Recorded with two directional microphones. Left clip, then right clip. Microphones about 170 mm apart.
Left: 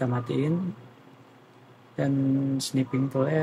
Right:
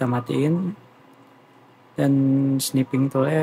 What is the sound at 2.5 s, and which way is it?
Speech, 20° right (ahead or behind).